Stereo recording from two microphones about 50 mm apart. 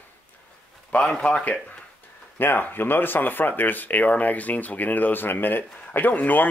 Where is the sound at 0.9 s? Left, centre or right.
Left.